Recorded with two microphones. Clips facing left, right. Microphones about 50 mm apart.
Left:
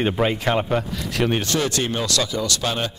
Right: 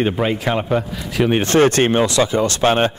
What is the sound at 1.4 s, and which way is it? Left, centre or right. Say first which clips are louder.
Speech: right 9 dB; right.